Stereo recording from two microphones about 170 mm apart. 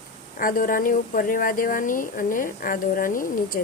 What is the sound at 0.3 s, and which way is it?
Speech, 55° left (ahead or behind).